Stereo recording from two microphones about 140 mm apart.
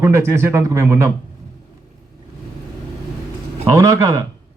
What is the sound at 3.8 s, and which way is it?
Speech, 20° right (ahead or behind).